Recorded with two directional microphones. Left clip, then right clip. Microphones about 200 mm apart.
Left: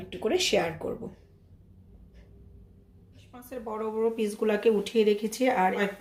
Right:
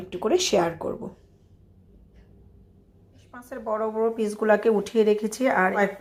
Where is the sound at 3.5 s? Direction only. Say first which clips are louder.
Right 6 dB; 15° right (ahead or behind).